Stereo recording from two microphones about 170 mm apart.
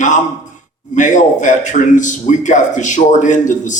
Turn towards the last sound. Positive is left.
turn(degrees=45)  # may be behind; listen again after turning